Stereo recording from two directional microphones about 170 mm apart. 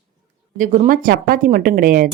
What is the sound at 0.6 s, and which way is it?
Speech, 50° right (ahead or behind).